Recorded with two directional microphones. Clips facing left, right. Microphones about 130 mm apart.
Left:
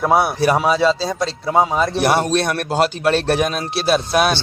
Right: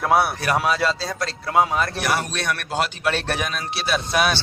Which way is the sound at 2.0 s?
35° left (ahead or behind).